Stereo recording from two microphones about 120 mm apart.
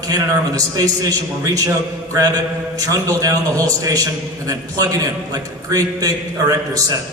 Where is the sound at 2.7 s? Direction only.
30° right (ahead or behind).